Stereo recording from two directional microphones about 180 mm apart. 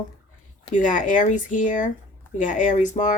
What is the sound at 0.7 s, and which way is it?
Speech, 45° left (ahead or behind).